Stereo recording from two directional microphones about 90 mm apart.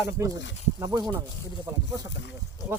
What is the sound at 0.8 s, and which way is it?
Speech, 50° right (ahead or behind).